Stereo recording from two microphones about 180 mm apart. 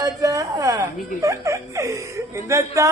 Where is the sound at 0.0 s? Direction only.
20° right (ahead or behind).